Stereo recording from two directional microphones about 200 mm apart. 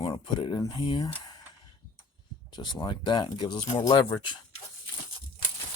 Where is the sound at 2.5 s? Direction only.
20° left (ahead or behind).